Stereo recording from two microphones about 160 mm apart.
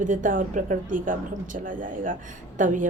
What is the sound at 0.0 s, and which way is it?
A woman's voice, 55° right (ahead or behind).